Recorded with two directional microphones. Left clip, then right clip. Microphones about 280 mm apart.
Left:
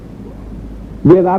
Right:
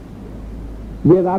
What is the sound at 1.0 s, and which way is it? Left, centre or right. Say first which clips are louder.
Speech: left 4 dB; left.